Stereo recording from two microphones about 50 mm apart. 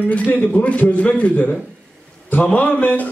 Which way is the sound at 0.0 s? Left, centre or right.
Left.